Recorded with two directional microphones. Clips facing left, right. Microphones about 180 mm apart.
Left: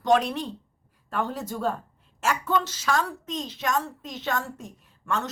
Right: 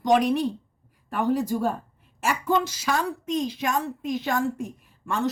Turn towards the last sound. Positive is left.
turn(degrees=-10)  # may be behind; listen again after turning